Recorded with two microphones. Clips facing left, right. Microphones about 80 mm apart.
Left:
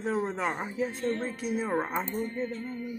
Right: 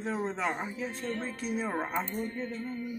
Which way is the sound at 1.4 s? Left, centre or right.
Centre.